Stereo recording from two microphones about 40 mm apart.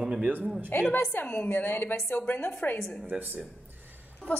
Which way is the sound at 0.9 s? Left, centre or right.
Left.